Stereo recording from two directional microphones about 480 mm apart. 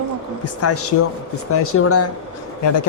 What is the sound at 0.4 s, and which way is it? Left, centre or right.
Speech, left.